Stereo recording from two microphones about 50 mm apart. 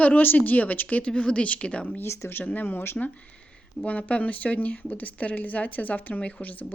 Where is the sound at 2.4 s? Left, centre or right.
Left.